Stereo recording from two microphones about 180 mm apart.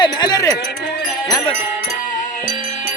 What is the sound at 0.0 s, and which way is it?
Speech, 25° left (ahead or behind).